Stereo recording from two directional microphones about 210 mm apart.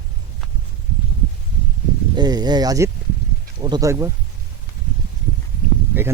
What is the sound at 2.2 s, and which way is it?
Speech, 20° right (ahead or behind).